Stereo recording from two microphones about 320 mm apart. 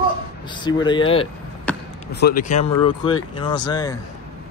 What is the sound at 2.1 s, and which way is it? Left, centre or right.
Speech, left.